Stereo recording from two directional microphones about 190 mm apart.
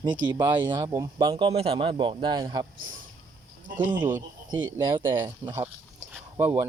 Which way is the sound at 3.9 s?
25° right (ahead or behind).